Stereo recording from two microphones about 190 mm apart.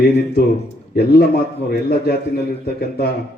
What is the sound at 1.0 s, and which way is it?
Speech, 60° left (ahead or behind).